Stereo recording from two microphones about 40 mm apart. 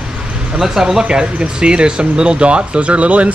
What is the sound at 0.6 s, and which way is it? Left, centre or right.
Speech, centre.